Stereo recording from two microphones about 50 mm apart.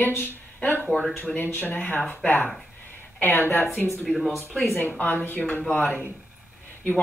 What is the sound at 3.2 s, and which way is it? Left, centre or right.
Speech, left.